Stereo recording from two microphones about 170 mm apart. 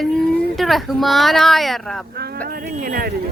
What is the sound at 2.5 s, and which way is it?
Speech, 60° right (ahead or behind).